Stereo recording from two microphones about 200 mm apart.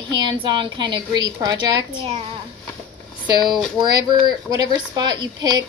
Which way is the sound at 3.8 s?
20° right (ahead or behind).